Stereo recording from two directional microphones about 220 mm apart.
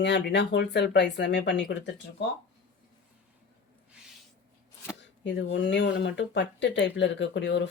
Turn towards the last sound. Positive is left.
turn(degrees=55)  # may be behind; listen again after turning